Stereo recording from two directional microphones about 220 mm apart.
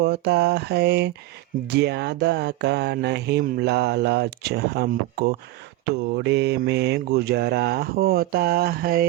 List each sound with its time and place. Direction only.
0.0 s mantra: 50° right (ahead or behind)